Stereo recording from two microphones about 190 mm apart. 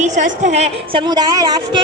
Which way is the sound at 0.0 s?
40° right (ahead or behind).